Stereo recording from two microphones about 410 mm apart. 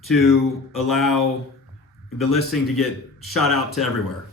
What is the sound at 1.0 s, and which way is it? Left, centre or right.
Speech, left.